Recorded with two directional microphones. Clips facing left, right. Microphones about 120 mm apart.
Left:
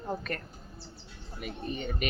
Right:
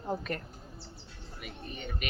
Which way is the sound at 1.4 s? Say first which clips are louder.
Left 7 dB; 30° left (ahead or behind).